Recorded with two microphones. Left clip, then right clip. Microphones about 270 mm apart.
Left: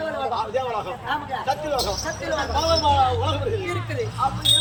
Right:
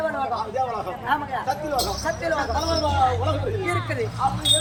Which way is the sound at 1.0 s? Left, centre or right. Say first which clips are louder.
Right 2 dB; centre.